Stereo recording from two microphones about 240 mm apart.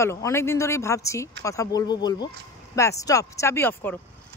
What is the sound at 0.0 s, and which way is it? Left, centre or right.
Speech, centre.